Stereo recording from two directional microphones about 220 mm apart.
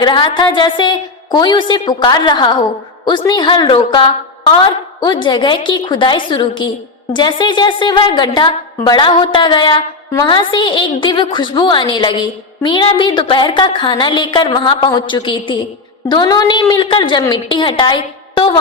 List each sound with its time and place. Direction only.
0.0 s a woman's voice: 20° left (ahead or behind)